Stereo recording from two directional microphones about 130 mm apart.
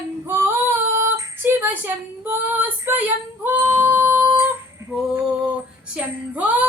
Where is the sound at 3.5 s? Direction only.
15° right (ahead or behind).